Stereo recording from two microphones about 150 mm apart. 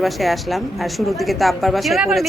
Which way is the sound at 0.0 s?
Centre (ahead or behind).